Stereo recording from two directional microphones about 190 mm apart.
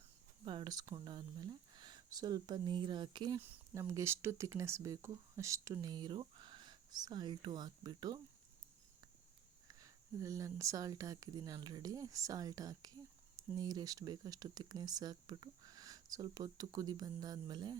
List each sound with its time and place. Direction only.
0.4 s speech: 25° right (ahead or behind)
3.4 s speech: 15° right (ahead or behind)
9.6 s speech: 15° right (ahead or behind)